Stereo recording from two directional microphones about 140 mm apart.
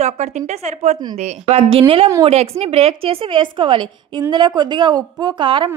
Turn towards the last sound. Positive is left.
turn(degrees=-35)  # may be behind; listen again after turning